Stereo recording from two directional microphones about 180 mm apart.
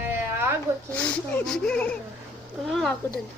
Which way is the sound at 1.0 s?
5° left (ahead or behind).